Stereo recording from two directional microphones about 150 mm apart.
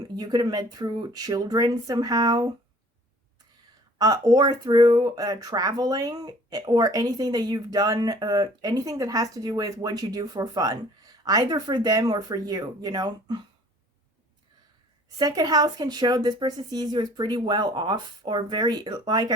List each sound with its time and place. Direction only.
0.2 s speech: 25° right (ahead or behind)
3.9 s speech: 25° right (ahead or behind)
15.2 s speech: 25° right (ahead or behind)